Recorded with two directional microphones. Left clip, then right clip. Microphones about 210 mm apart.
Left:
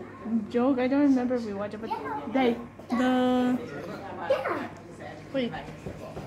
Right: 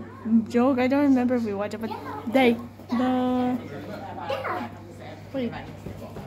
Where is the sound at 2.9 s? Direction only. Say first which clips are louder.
Even; 20° left (ahead or behind).